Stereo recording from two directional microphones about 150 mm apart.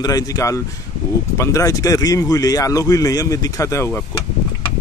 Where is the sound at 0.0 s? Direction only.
25° left (ahead or behind).